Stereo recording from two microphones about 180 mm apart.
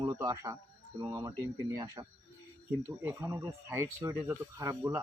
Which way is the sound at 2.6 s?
15° right (ahead or behind).